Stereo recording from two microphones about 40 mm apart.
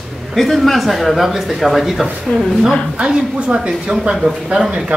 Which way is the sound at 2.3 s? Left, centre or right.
Left.